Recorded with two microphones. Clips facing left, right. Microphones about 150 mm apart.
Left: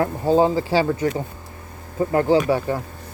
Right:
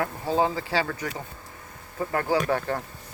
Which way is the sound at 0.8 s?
20° left (ahead or behind).